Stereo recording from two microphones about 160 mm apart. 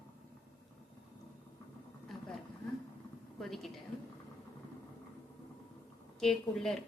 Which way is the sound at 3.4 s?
Centre (ahead or behind).